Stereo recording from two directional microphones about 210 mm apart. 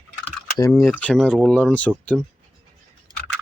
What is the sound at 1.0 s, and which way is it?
Speech, 5° left (ahead or behind).